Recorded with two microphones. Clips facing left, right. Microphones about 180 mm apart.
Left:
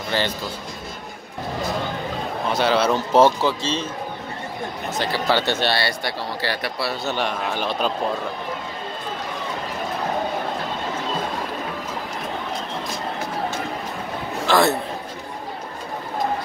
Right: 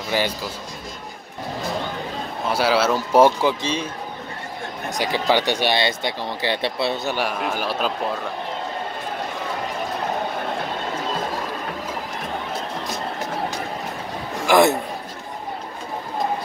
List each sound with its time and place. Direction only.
0.1 s speech: 10° right (ahead or behind)
2.5 s speech: 5° right (ahead or behind); by 7.0 s 25° right (ahead or behind)
7.1 s speech: 10° right (ahead or behind)
14.5 s a man's voice: 15° right (ahead or behind)